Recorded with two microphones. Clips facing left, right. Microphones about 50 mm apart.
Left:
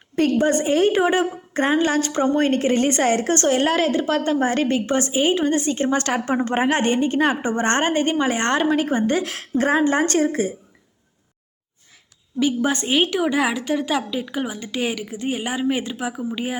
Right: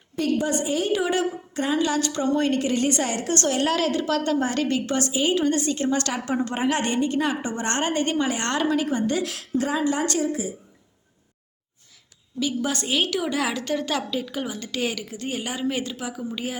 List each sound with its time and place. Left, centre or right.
0.2 s a woman's voice: left
12.4 s a woman's voice: left